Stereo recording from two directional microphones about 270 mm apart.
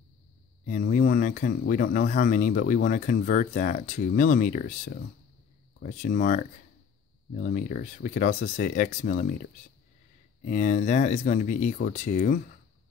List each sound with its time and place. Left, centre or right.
0.7 s speech: left
10.4 s speech: left